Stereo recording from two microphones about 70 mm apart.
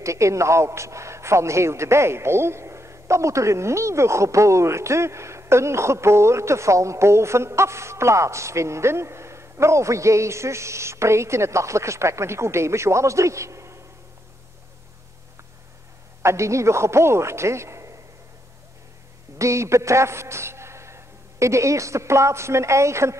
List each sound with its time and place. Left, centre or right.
0.0 s a man's voice: right
16.2 s a man's voice: right
19.3 s a man's voice: right